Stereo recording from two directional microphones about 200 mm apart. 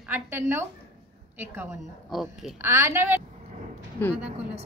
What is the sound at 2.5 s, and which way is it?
Speech, 15° right (ahead or behind).